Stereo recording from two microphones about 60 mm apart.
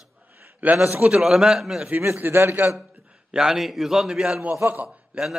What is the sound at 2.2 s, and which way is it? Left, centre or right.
Speech, right.